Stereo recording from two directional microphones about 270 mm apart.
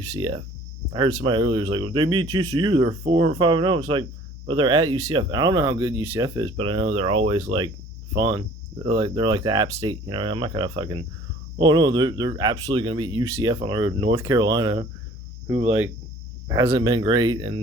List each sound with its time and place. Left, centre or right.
0.0 s speech: centre